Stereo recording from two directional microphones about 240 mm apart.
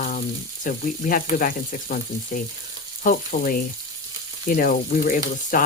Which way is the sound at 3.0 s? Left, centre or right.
Left.